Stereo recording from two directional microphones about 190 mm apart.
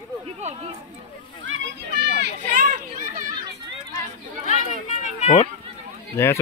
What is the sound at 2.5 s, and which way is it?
Children playing, 45° right (ahead or behind).